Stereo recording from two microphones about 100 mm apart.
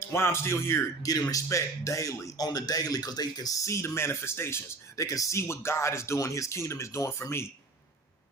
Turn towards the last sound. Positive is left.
turn(degrees=25)  # may be behind; listen again after turning